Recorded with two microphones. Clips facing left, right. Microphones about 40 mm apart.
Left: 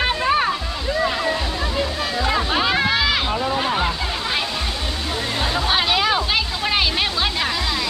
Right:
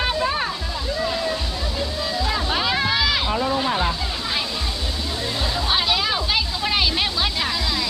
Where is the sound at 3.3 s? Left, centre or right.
Centre.